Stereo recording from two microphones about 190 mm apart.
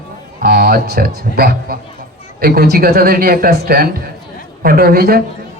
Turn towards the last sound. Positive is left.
turn(degrees=-50)  # may be behind; listen again after turning